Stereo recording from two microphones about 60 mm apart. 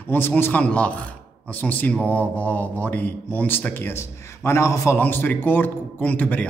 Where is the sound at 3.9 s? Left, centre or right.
Left.